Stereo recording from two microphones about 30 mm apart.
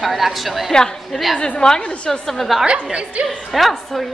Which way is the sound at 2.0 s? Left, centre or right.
Centre.